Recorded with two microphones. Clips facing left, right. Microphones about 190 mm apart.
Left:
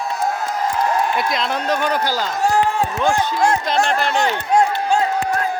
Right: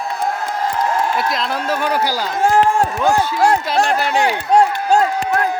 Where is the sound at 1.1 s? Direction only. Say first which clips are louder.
Right 1 dB; centre (ahead or behind).